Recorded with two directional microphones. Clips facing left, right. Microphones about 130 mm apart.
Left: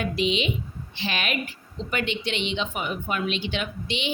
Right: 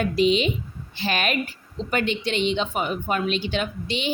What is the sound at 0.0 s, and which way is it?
A woman's voice, 40° right (ahead or behind).